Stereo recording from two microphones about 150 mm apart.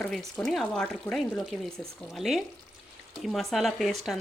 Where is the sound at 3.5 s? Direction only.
Centre (ahead or behind).